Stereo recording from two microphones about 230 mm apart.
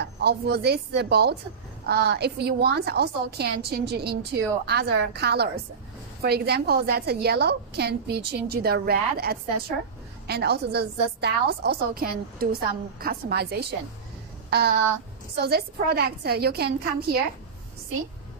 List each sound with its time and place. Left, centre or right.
0.0 s a woman's voice: right
14.5 s a sound: right
15.3 s a woman's voice: right